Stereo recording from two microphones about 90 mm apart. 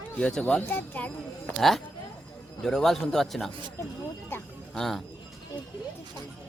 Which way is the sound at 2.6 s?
5° left (ahead or behind).